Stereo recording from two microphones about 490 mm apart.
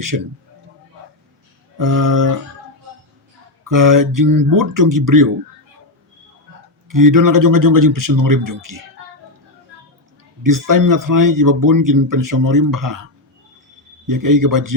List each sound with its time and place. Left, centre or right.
0.1 s a man's voice: right
1.8 s a man's voice: right
3.6 s a man's voice: right
6.8 s a man's voice: right
10.4 s a man's voice: right
14.1 s a man's voice: right